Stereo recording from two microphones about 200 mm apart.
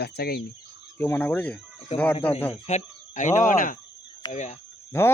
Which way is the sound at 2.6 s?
35° left (ahead or behind).